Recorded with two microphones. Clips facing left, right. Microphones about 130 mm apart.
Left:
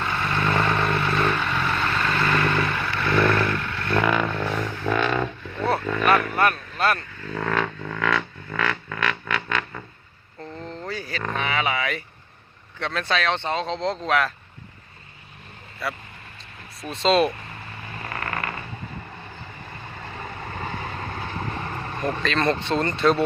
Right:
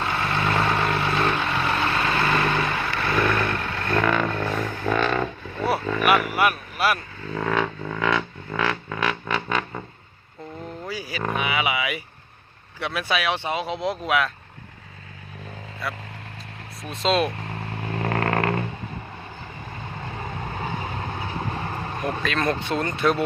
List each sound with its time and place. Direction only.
0.0 s vehicle: 10° right (ahead or behind)
3.5 s vehicle: 30° right (ahead or behind)
4.0 s a sound: 5° left (ahead or behind)
7.8 s music: 15° right (ahead or behind)
10.6 s a sound: 5° right (ahead or behind)
12.8 s speech: 10° right (ahead or behind)
15.8 s speech: centre (ahead or behind)
17.7 s vehicle: 60° right (ahead or behind)
20.4 s vehicle: 10° right (ahead or behind)
22.1 s speech: 5° right (ahead or behind)